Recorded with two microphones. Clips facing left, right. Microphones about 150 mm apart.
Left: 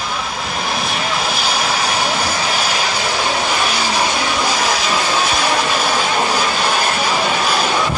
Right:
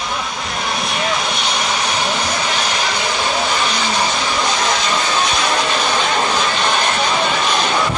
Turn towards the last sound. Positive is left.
turn(degrees=5)  # may be behind; listen again after turning